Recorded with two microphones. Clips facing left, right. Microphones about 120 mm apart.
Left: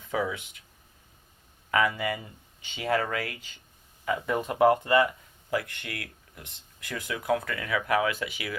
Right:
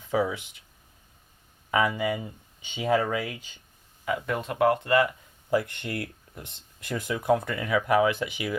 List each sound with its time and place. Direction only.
0.1 s speech: 20° right (ahead or behind)
1.7 s speech: 20° right (ahead or behind)
4.3 s speech: 10° left (ahead or behind)
5.5 s speech: 25° right (ahead or behind)